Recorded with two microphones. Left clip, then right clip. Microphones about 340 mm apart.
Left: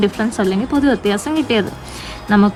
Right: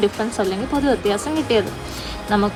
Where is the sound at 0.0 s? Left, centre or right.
Centre.